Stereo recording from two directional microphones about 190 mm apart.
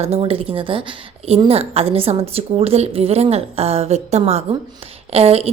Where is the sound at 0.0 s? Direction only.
30° right (ahead or behind).